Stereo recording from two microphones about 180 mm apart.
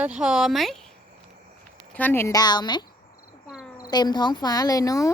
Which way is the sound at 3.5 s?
5° right (ahead or behind).